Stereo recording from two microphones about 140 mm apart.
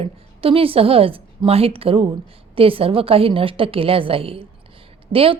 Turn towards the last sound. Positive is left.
turn(degrees=-40)  # may be behind; listen again after turning